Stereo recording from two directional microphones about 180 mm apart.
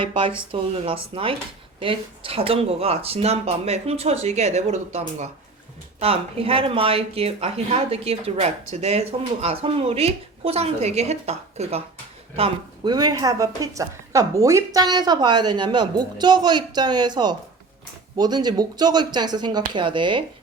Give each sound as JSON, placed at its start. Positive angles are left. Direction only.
{"t": 0.1, "sound": "speech", "side_deg": -30}
{"t": 12.4, "sound": "speech", "side_deg": -25}